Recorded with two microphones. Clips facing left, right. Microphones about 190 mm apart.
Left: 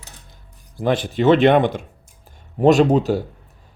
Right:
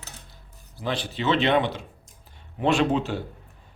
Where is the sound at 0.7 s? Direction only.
50° left (ahead or behind).